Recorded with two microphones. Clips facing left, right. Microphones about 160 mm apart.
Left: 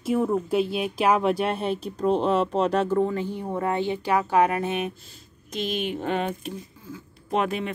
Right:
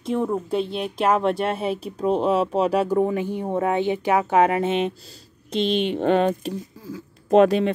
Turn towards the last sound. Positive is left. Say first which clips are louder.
# right 10 dB
turn(degrees=-40)  # may be behind; listen again after turning